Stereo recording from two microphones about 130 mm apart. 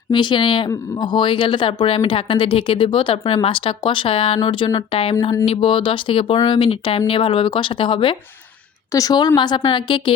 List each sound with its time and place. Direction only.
0.1 s speech: 35° left (ahead or behind)
8.9 s speech: 25° left (ahead or behind)